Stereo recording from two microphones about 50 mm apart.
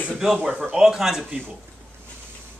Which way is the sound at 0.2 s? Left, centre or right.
Centre.